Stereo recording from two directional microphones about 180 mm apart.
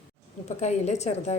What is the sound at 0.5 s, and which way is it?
Speech, 40° left (ahead or behind).